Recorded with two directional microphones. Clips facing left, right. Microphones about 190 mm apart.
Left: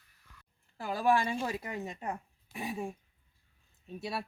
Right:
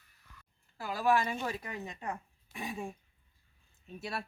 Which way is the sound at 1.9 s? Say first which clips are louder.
Left 2 dB; 25° left (ahead or behind).